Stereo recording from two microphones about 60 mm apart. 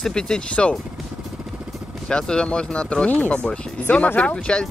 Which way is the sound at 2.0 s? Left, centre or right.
Centre.